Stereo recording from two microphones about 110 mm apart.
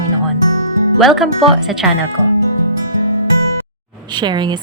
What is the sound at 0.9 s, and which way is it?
Speech, centre (ahead or behind).